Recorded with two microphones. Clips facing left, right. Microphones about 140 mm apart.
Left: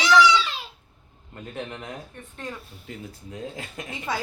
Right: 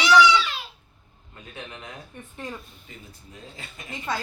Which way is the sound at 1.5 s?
45° left (ahead or behind).